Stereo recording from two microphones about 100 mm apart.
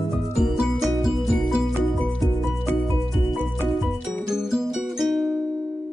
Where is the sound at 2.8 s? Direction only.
Centre (ahead or behind).